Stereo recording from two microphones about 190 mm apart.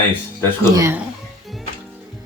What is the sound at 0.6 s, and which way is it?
Speech, 20° right (ahead or behind).